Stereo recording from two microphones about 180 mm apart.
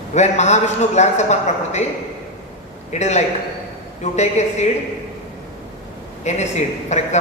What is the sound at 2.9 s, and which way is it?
A man's voice, 40° left (ahead or behind).